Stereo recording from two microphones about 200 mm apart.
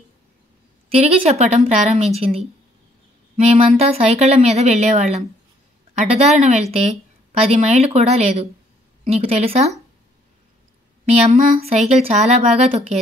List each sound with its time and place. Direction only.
0.8 s speech: 30° right (ahead or behind)
3.5 s a woman's voice: 30° right (ahead or behind)
11.2 s speech: 30° right (ahead or behind)